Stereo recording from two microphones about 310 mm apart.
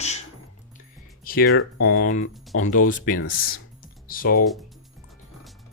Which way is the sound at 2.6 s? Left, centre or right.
Left.